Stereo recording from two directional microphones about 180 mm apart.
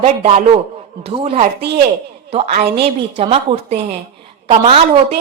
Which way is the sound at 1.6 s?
65° right (ahead or behind).